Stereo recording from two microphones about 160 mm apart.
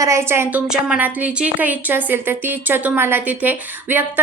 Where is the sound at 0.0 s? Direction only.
15° right (ahead or behind).